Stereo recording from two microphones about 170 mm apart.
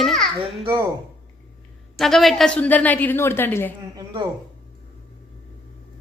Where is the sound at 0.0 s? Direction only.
5° left (ahead or behind).